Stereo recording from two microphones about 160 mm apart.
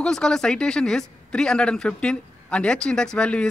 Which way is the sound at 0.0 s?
5° left (ahead or behind).